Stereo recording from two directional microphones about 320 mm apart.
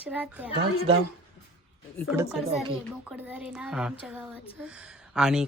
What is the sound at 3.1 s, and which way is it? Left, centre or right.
Speech, centre.